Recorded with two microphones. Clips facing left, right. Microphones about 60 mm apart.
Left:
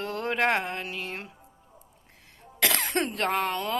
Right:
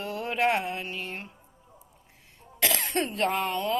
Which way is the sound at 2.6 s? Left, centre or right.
Left.